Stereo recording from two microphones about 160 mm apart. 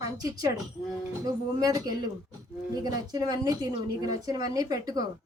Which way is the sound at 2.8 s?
25° right (ahead or behind).